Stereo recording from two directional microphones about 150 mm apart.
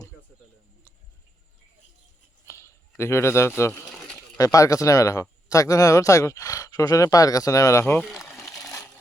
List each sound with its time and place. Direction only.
2.5 s a sound: 20° left (ahead or behind)
3.0 s a man's voice: 15° left (ahead or behind)
3.8 s pigeon: centre (ahead or behind)
4.4 s speech: 20° left (ahead or behind)